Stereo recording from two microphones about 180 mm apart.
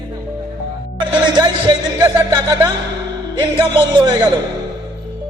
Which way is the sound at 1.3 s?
25° right (ahead or behind).